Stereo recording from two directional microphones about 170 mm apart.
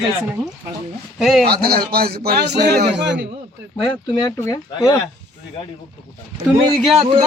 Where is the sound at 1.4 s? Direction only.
65° right (ahead or behind).